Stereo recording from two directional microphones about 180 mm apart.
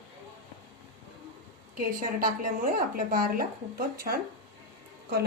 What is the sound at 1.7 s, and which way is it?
Speech, 55° right (ahead or behind).